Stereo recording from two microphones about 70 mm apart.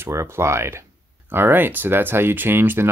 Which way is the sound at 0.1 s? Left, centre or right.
Right.